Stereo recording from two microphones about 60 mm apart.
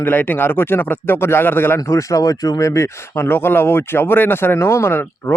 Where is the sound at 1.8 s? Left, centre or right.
Left.